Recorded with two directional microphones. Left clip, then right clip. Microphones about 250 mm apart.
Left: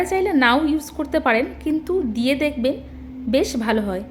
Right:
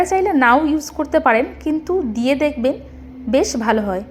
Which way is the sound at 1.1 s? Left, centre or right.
Centre.